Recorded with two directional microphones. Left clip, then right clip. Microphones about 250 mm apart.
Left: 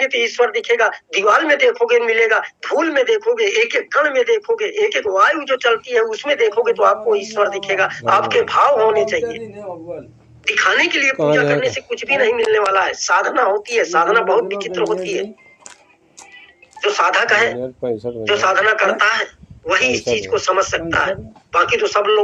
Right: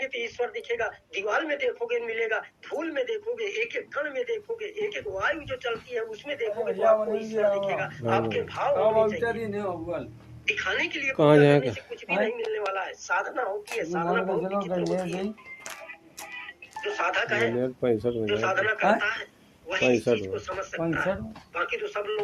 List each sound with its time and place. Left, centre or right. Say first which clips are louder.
0.0 s speech: left 14 dB; left
10.4 s speech: left 12 dB; left
16.8 s speech: left 12 dB; left
17.6 s speech: left 3 dB; centre
18.3 s speech: left 13 dB; left